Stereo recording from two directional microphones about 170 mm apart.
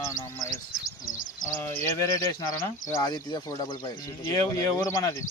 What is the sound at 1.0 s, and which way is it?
Speech, 50° left (ahead or behind).